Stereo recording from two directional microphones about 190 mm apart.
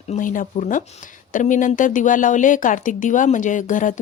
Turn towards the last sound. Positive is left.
turn(degrees=45)  # may be behind; listen again after turning